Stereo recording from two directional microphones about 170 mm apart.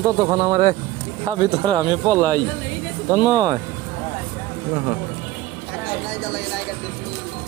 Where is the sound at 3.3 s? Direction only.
20° right (ahead or behind).